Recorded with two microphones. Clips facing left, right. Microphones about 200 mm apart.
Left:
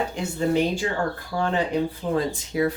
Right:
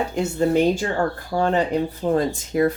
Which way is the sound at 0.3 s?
45° right (ahead or behind).